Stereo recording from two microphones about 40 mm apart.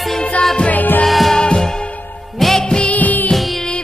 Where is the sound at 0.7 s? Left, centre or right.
Left.